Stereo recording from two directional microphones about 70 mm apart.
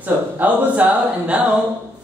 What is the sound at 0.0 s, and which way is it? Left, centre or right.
Speech, right.